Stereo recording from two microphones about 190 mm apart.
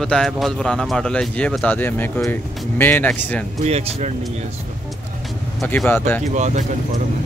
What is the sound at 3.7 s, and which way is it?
Speech, 35° right (ahead or behind).